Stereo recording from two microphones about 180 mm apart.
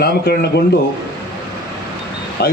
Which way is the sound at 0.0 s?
60° left (ahead or behind).